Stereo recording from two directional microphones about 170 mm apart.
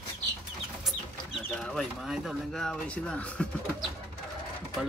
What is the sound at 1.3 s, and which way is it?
Speech, 5° left (ahead or behind).